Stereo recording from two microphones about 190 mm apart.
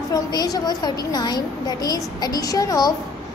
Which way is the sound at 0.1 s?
20° left (ahead or behind).